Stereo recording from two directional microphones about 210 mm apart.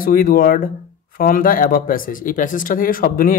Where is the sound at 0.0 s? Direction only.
45° left (ahead or behind).